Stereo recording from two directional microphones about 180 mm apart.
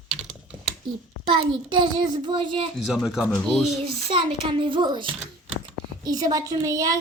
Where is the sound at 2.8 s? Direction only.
Centre (ahead or behind).